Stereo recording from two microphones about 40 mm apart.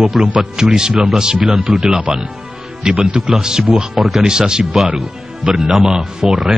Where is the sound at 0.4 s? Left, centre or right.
Centre.